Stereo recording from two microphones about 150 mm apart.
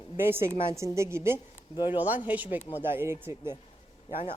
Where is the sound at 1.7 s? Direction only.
35° left (ahead or behind).